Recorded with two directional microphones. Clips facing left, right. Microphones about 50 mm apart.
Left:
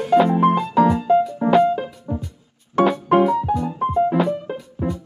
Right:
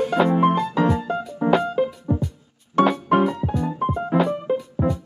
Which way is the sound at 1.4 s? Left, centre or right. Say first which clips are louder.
Left 3 dB; centre.